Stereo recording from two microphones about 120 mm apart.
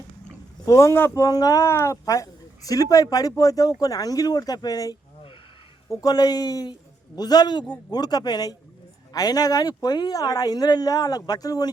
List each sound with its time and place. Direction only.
0.6 s speech: 25° left (ahead or behind)